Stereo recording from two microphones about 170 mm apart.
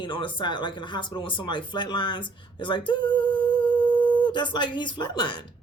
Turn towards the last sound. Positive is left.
turn(degrees=25)  # may be behind; listen again after turning